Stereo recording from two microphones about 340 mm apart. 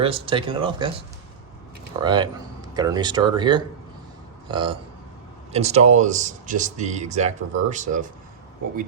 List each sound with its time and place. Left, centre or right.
0.0 s speech: centre
2.0 s speech: centre